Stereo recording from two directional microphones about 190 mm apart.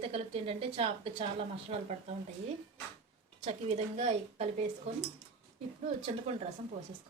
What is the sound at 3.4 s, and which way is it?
A woman's voice, 35° right (ahead or behind).